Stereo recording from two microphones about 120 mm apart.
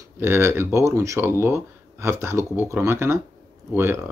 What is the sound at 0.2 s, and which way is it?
Speech, 20° right (ahead or behind).